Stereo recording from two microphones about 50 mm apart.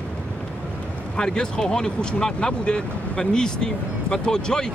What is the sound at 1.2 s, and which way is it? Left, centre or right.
Speech, centre.